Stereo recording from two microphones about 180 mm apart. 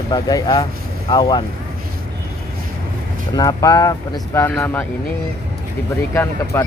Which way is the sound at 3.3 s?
20° left (ahead or behind).